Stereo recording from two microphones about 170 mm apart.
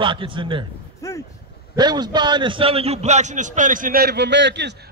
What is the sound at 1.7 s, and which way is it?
A man's voice, 25° right (ahead or behind).